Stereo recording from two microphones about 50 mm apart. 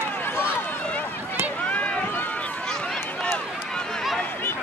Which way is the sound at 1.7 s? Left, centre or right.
Left.